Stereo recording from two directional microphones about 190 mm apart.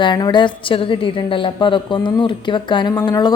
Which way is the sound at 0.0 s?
25° left (ahead or behind).